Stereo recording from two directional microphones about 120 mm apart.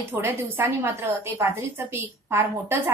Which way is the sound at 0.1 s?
15° right (ahead or behind).